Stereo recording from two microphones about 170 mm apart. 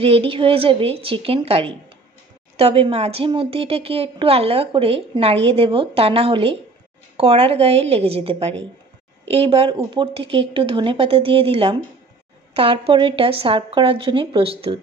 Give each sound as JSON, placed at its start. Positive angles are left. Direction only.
{"t": 0.0, "sound": "speech", "side_deg": -35}